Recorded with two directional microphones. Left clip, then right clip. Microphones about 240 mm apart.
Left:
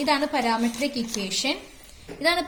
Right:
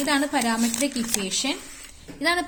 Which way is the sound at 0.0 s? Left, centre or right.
Right.